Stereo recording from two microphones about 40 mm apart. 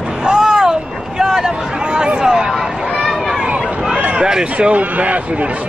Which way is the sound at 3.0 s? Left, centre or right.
Centre.